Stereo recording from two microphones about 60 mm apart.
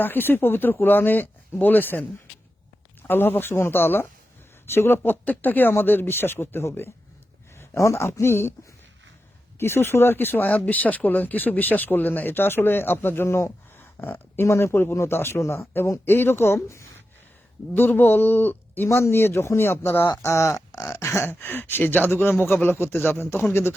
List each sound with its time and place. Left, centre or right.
0.0 s speech: left
9.6 s speech: left
17.7 s speech: left
18.9 s speech: left
20.3 s speech: left
20.7 s a sound: left
21.2 s speech: left